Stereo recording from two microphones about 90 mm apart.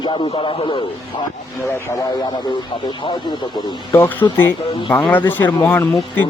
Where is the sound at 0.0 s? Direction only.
65° left (ahead or behind).